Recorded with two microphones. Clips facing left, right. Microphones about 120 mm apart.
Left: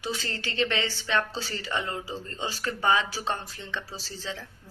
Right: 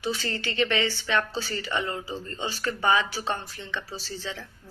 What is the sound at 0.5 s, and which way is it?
Speech, 30° left (ahead or behind).